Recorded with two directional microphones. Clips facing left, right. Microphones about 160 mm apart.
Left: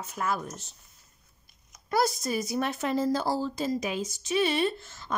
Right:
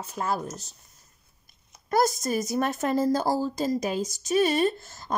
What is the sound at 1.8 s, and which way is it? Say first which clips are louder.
Speech: right 3 dB; 45° right (ahead or behind).